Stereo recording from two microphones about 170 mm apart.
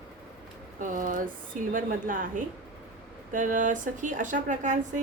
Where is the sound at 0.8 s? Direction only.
50° right (ahead or behind).